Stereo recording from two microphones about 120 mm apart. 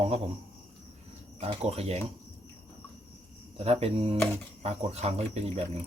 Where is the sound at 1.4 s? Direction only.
60° right (ahead or behind).